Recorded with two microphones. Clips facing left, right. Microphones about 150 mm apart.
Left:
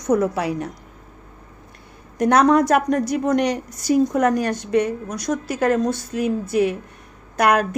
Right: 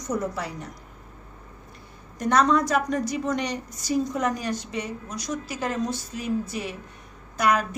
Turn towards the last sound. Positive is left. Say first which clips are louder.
# left 5 dB
turn(degrees=60)  # may be behind; listen again after turning